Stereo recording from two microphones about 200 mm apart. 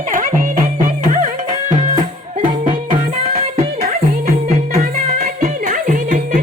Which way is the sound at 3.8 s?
45° right (ahead or behind).